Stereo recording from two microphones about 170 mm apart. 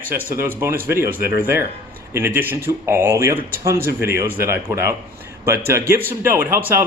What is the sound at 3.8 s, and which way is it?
Speech, 70° left (ahead or behind).